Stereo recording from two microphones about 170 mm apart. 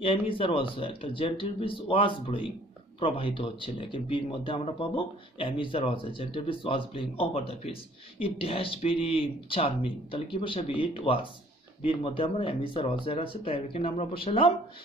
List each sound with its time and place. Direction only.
0.0 s speech: 30° left (ahead or behind)